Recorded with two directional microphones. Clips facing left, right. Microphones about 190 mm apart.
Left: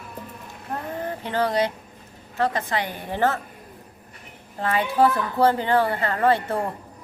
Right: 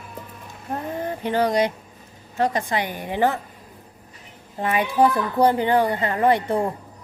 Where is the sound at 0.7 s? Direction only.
15° right (ahead or behind).